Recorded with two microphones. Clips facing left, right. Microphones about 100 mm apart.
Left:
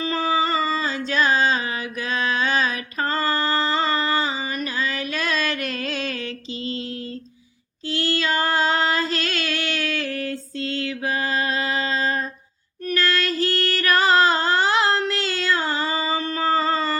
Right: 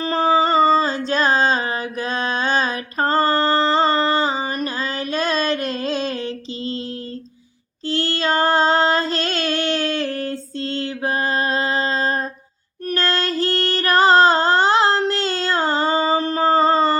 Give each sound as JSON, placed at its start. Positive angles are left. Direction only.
{"t": 0.0, "sound": "a sound", "side_deg": -40}
{"t": 7.9, "sound": "child singing", "side_deg": -30}
{"t": 12.9, "sound": "music", "side_deg": -30}